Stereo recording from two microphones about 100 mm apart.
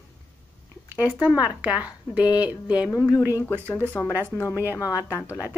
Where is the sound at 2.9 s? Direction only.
30° left (ahead or behind).